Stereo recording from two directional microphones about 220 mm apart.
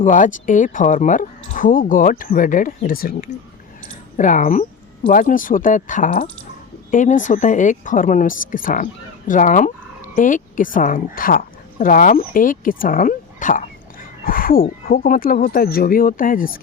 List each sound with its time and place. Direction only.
0.0 s a woman's voice: 35° left (ahead or behind)